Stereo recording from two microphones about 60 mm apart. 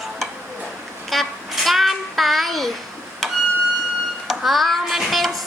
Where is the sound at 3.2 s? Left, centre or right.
Centre.